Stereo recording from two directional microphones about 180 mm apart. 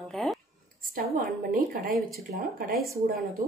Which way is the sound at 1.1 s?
45° right (ahead or behind).